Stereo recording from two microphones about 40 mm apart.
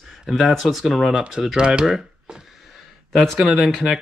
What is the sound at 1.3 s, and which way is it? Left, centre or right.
Speech, centre.